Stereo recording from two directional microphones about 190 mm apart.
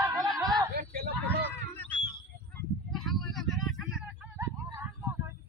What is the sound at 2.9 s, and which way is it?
Vehicle, centre (ahead or behind).